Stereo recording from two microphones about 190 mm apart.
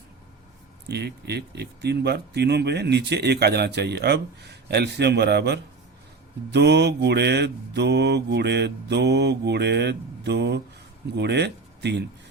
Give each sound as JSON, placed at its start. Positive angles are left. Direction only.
{"t": 0.9, "sound": "speech", "side_deg": -60}